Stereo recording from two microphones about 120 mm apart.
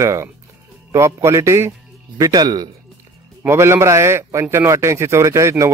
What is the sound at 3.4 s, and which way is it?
Speech, 20° right (ahead or behind).